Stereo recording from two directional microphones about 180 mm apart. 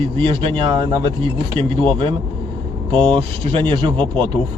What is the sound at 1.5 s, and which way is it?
A man's voice, 30° right (ahead or behind).